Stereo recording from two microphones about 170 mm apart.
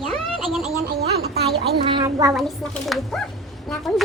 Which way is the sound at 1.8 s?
25° right (ahead or behind).